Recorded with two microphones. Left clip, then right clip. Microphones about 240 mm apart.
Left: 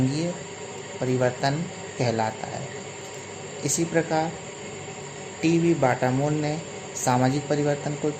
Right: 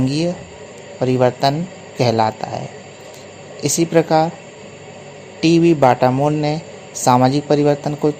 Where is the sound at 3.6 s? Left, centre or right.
Right.